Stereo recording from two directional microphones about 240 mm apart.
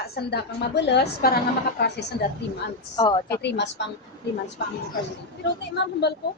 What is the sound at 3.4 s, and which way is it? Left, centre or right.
Speech, left.